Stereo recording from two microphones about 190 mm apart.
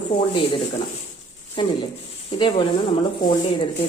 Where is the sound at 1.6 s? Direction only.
25° left (ahead or behind).